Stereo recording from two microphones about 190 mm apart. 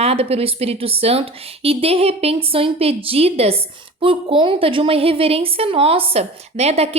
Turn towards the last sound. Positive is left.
turn(degrees=-35)  # may be behind; listen again after turning